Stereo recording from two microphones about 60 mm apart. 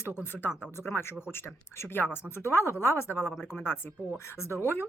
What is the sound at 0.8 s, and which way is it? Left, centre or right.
Speech, left.